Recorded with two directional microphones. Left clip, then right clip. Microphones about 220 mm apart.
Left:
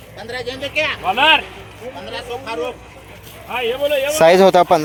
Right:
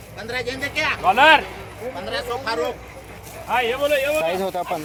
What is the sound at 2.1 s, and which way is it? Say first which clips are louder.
Speech: right 2 dB; 10° right (ahead or behind).